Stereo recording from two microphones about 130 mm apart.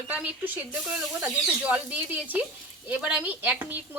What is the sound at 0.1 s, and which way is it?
Speech, 10° right (ahead or behind).